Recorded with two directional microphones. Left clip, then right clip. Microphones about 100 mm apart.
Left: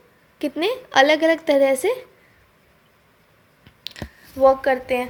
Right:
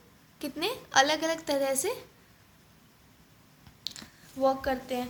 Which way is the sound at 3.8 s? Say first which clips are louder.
Left 5 dB; 50° left (ahead or behind).